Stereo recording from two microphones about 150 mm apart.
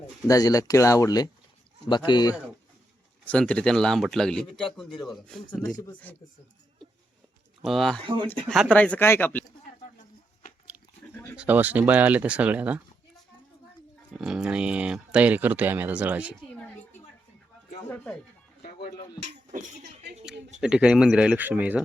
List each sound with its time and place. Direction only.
0.3 s speech: 25° left (ahead or behind)
3.2 s speech: 5° left (ahead or behind)
6.1 s speech: 10° left (ahead or behind)
7.6 s speech: centre (ahead or behind)
8.0 s speech: 35° right (ahead or behind)
8.7 s speech: 10° left (ahead or behind)
11.3 s speech: 10° right (ahead or behind)
14.1 s speech: 5° right (ahead or behind)
17.8 s speech: 15° left (ahead or behind)
19.5 s speech: 50° right (ahead or behind)
20.6 s speech: 5° right (ahead or behind)